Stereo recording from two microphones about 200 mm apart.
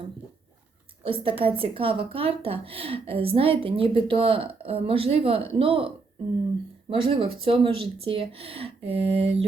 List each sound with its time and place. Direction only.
1.0 s speech: 25° right (ahead or behind)
6.9 s speech: 25° right (ahead or behind)